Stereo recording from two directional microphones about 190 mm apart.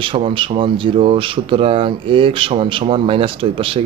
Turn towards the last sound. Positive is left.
turn(degrees=-30)  # may be behind; listen again after turning